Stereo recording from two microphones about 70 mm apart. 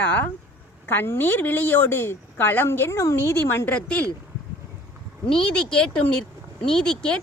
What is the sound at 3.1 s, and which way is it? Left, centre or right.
Speech, left.